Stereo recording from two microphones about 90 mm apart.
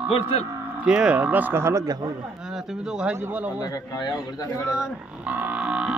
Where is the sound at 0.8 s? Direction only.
10° right (ahead or behind); by 2.1 s 45° right (ahead or behind).